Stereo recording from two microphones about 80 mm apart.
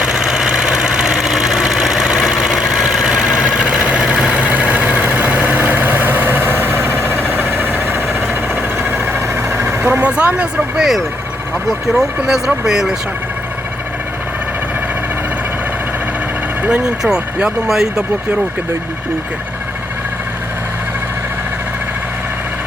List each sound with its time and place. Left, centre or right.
0.0 s engine: centre
5.0 s vehicle: right; by 11.0 s centre
11.7 s speech: centre
16.6 s speech: centre